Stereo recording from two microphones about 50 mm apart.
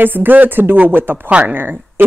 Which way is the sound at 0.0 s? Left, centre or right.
Right.